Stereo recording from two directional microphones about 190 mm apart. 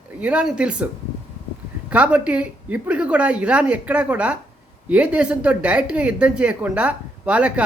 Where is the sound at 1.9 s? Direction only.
5° right (ahead or behind).